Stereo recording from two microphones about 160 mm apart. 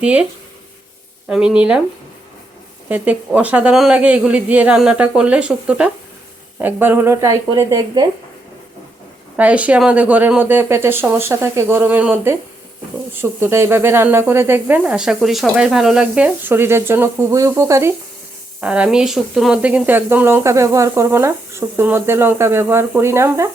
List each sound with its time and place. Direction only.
0.0 s speech: 5° right (ahead or behind)
1.3 s speech: 5° right (ahead or behind)
2.9 s speech: 10° right (ahead or behind)
9.3 s speech: 10° right (ahead or behind)
13.4 s speech: 15° right (ahead or behind)